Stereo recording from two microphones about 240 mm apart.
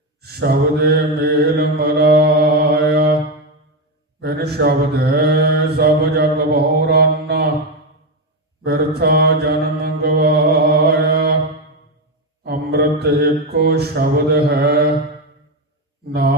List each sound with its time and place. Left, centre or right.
0.2 s mantra: right
4.2 s mantra: right
8.6 s mantra: right
12.4 s mantra: right